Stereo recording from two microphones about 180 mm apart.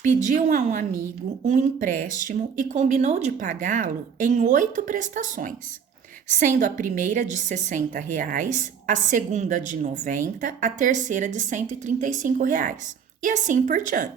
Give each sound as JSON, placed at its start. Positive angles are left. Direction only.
{"t": 0.0, "sound": "a woman's voice", "side_deg": -45}